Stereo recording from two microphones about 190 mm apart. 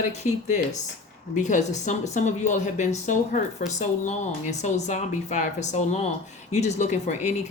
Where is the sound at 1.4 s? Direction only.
40° left (ahead or behind).